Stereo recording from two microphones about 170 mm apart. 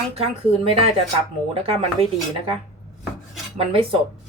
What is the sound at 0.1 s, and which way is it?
A woman's voice, 35° right (ahead or behind).